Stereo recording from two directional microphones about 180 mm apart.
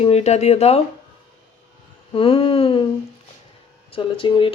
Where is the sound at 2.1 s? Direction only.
30° left (ahead or behind).